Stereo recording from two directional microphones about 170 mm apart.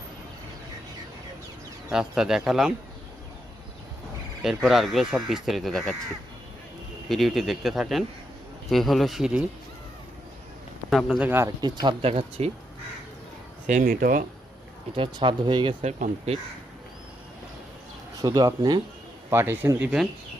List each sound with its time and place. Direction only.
1.9 s speech: 5° right (ahead or behind)
4.4 s speech: centre (ahead or behind)
7.1 s speech: centre (ahead or behind)
10.8 s speech: centre (ahead or behind)
11.3 s speech: 15° right (ahead or behind)
11.6 s speech: 25° right (ahead or behind)
12.4 s speech: 35° right (ahead or behind)
13.7 s speech: 50° right (ahead or behind)
14.9 s speech: 30° right (ahead or behind)
15.8 s speech: 40° right (ahead or behind)
18.2 s speech: 25° right (ahead or behind)
19.3 s speech: 15° right (ahead or behind)